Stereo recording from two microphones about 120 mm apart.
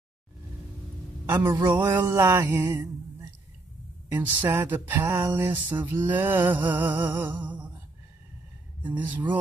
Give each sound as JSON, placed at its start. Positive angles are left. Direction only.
{"t": 1.2, "sound": "a man's voice", "side_deg": -20}
{"t": 1.7, "sound": "music", "side_deg": -15}
{"t": 4.1, "sound": "music", "side_deg": -15}
{"t": 7.4, "sound": "a sound", "side_deg": -10}
{"t": 8.8, "sound": "music", "side_deg": -15}